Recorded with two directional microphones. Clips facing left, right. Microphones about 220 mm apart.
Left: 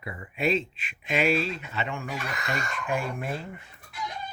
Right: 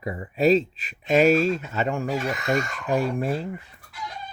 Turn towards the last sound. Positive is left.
turn(degrees=-35)  # may be behind; listen again after turning